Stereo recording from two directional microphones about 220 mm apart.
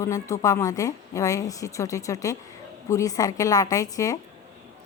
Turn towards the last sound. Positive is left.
turn(degrees=15)  # may be behind; listen again after turning